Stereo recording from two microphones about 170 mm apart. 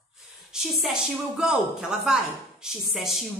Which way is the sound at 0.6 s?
Centre (ahead or behind).